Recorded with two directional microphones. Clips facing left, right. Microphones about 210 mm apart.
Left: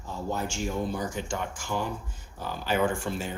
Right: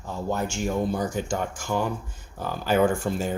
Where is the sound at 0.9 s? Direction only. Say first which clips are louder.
Right 5 dB; 40° right (ahead or behind).